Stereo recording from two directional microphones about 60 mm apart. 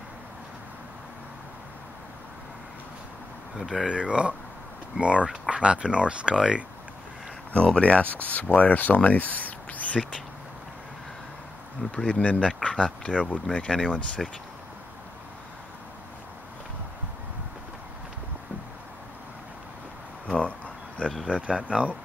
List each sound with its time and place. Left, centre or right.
3.5 s speech: centre
7.5 s speech: centre
11.8 s speech: centre
14.2 s speech: centre
20.3 s a sound: centre
21.3 s speech: centre